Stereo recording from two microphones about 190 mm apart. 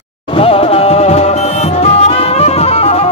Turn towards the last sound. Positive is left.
turn(degrees=35)  # may be behind; listen again after turning